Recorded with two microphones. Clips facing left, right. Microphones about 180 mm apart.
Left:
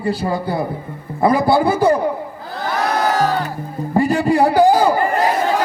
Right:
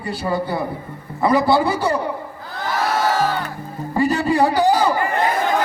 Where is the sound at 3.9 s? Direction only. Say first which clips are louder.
Left 2 dB; 45° left (ahead or behind).